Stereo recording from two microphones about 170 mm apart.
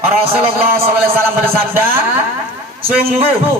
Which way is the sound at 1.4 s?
15° right (ahead or behind).